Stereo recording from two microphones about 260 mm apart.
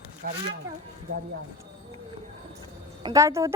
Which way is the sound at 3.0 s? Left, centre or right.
Centre.